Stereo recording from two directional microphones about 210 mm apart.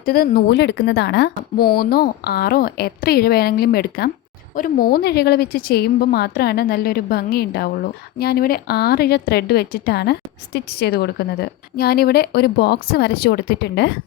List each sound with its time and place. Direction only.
0.0 s a woman's voice: 45° left (ahead or behind)